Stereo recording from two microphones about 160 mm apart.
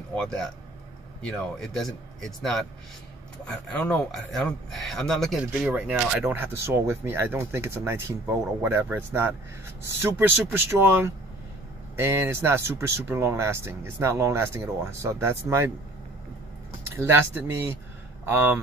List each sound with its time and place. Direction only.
0.1 s speech: 5° left (ahead or behind); by 15.7 s 15° right (ahead or behind)
16.9 s speech: 15° right (ahead or behind)